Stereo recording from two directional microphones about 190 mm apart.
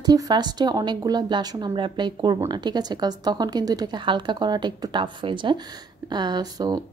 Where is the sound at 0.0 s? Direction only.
20° right (ahead or behind).